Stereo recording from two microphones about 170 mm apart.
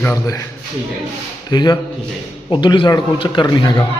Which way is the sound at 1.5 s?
25° left (ahead or behind).